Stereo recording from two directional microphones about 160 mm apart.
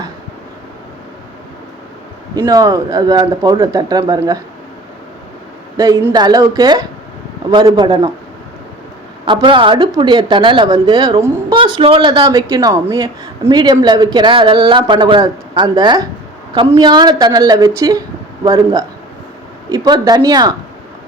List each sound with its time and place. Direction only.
2.4 s speech: 20° right (ahead or behind)
5.7 s speech: 20° right (ahead or behind)
9.2 s a woman's voice: 30° right (ahead or behind)
11.5 s speech: 30° right (ahead or behind)